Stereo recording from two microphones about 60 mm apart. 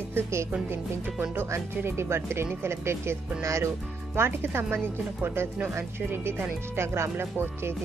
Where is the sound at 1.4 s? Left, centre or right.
Right.